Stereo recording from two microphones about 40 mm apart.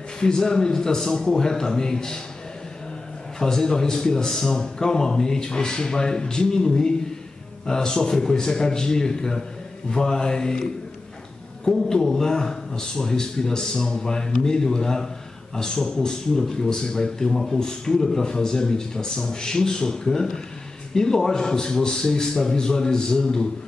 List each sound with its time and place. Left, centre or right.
0.2 s speech: centre
3.3 s speech: centre
11.7 s speech: centre